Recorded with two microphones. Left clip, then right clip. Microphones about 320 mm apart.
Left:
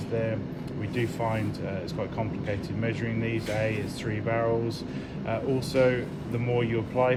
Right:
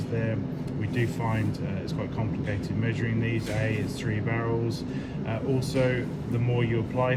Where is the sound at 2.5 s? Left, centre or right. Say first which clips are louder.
Left 1 dB; centre.